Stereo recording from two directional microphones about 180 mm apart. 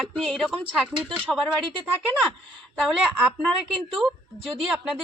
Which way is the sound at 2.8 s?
Centre (ahead or behind).